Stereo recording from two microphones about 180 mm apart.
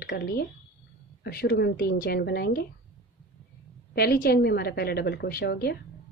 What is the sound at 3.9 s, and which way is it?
A woman's voice, 60° left (ahead or behind).